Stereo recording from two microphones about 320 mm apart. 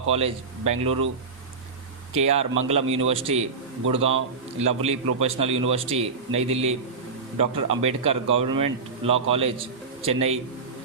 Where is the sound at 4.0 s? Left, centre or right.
Right.